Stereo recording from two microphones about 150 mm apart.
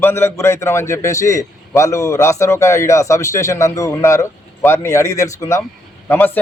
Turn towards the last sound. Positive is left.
turn(degrees=15)  # may be behind; listen again after turning